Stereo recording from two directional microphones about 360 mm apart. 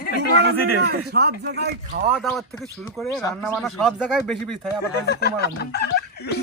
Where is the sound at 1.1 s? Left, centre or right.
Right.